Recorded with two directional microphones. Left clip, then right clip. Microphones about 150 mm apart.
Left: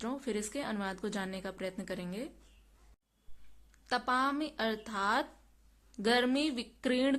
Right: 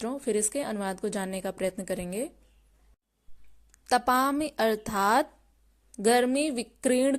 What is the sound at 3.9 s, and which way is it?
A woman's voice, 60° right (ahead or behind).